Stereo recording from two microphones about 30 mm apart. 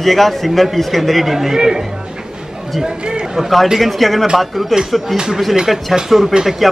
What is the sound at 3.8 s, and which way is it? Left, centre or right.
Speech, centre.